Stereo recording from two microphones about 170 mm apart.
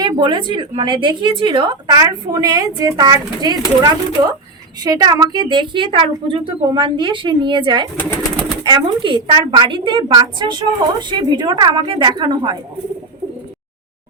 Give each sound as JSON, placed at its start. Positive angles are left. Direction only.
{"t": 0.0, "sound": "speech", "side_deg": -25}
{"t": 7.9, "sound": "speech", "side_deg": 10}
{"t": 8.6, "sound": "speech", "side_deg": -25}